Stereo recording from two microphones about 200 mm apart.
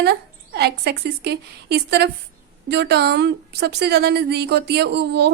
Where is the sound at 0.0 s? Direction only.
55° right (ahead or behind).